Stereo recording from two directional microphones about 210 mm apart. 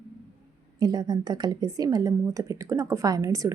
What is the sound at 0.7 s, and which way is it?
A woman's voice, 20° right (ahead or behind).